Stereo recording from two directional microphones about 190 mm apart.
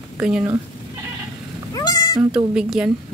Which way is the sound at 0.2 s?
5° right (ahead or behind).